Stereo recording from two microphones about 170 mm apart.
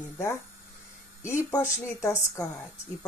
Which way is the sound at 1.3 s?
15° left (ahead or behind).